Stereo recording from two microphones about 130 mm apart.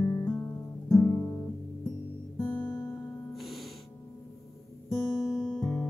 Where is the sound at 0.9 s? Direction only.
25° left (ahead or behind).